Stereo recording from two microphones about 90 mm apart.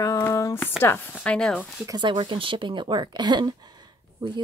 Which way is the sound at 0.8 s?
25° left (ahead or behind).